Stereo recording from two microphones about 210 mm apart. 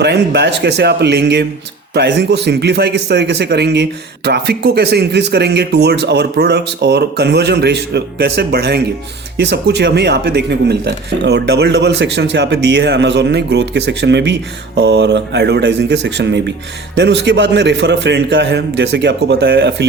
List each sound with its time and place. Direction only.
0.0 s a man's voice: 55° right (ahead or behind)